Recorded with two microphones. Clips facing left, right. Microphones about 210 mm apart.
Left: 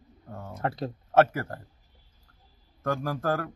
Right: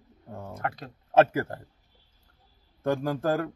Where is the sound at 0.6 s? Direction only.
30° left (ahead or behind).